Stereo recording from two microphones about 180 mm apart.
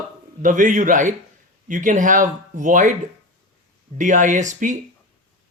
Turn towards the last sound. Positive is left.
turn(degrees=-45)  # may be behind; listen again after turning